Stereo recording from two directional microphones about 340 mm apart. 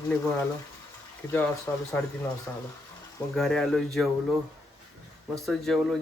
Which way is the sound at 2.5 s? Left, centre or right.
Centre.